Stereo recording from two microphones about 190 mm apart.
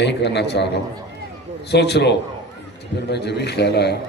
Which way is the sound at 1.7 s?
60° left (ahead or behind).